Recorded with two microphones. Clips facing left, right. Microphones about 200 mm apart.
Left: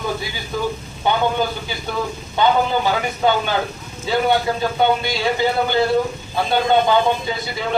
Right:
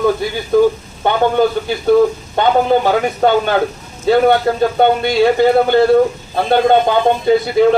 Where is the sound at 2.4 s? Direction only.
60° right (ahead or behind).